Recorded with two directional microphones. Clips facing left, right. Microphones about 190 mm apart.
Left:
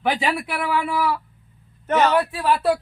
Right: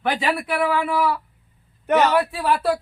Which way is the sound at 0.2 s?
Centre (ahead or behind).